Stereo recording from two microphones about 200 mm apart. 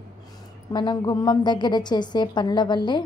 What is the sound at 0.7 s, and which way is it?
A woman's voice, 20° left (ahead or behind).